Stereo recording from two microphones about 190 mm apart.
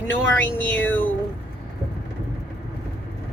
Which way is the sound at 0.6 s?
10° left (ahead or behind).